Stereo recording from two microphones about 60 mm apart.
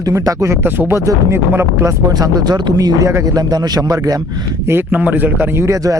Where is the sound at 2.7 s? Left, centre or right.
Right.